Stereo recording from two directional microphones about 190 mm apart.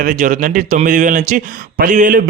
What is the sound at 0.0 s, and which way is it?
A man's voice, 45° right (ahead or behind).